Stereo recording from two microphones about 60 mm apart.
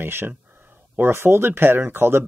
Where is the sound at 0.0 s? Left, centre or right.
Right.